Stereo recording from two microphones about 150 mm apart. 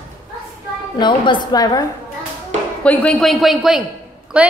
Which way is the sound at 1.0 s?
30° left (ahead or behind).